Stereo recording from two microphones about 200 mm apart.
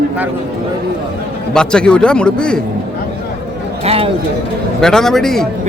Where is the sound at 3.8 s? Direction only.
30° right (ahead or behind).